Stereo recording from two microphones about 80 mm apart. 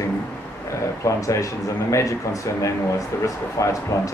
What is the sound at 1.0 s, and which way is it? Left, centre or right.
Speech, left.